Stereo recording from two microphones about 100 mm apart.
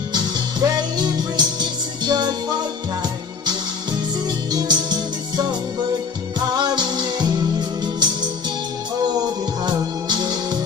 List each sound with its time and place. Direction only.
0.1 s music: 45° right (ahead or behind)
4.5 s music: 45° right (ahead or behind)
9.7 s music: 45° right (ahead or behind)